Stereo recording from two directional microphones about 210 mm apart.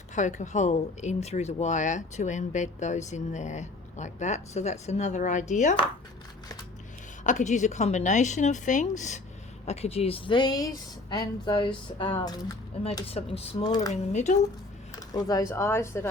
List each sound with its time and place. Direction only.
0.1 s speech: 35° left (ahead or behind)
7.3 s speech: 35° left (ahead or behind)
13.9 s speech: 35° left (ahead or behind)
14.9 s speech: 15° left (ahead or behind)